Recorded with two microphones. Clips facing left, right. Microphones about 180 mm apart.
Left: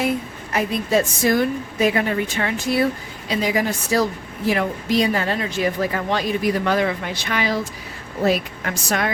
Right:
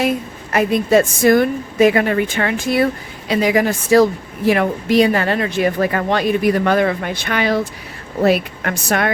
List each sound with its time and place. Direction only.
0.5 s a woman's voice: 60° right (ahead or behind)